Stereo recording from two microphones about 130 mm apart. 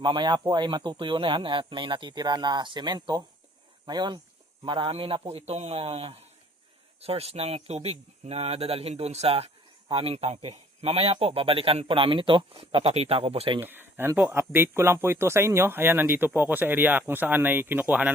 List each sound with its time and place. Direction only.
0.0 s a man's voice: 35° right (ahead or behind)
13.6 s speech: 15° right (ahead or behind)